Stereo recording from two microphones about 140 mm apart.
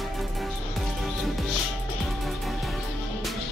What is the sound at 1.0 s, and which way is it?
Music, centre (ahead or behind).